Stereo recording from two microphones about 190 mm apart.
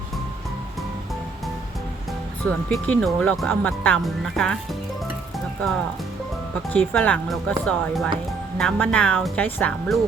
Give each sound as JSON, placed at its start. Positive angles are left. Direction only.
{"t": 2.5, "sound": "speech", "side_deg": 5}
{"t": 6.7, "sound": "speech", "side_deg": 10}